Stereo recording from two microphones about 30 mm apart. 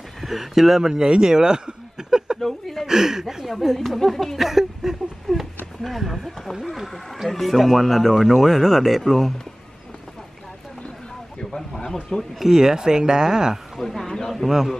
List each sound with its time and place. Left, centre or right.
0.2 s speech: centre
1.0 s speech: right
2.4 s speech: centre
2.9 s speech: centre
3.4 s speech: centre
4.5 s speech: centre
11.5 s speech: centre
12.5 s speech: right
13.7 s speech: centre